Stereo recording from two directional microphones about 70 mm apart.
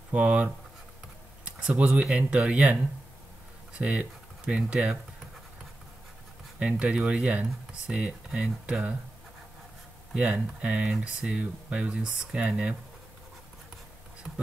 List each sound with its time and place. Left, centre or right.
0.1 s speech: centre
1.4 s a sound: centre
2.0 s speech: centre
6.6 s speech: centre
10.1 s speech: centre